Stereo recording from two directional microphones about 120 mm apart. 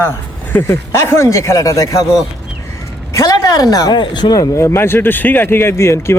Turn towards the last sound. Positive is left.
turn(degrees=25)  # may be behind; listen again after turning